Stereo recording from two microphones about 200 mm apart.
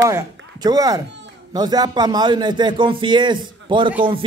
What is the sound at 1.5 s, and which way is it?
A man's voice, 20° right (ahead or behind).